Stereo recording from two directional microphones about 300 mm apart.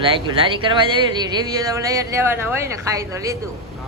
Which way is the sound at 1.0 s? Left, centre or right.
Centre.